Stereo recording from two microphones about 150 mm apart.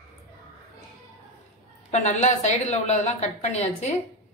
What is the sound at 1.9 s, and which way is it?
A woman's voice, 50° left (ahead or behind).